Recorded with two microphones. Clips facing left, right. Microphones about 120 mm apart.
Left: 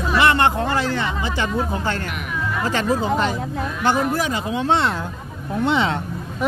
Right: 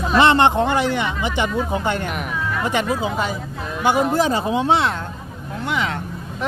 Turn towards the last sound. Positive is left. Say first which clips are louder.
# left 4 dB
turn(degrees=25)  # may be behind; listen again after turning